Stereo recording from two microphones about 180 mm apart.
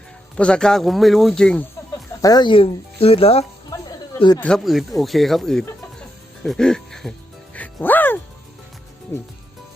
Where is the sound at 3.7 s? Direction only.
20° left (ahead or behind).